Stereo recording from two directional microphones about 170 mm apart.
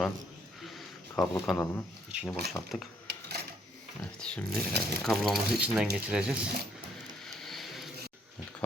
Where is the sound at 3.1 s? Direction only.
75° right (ahead or behind).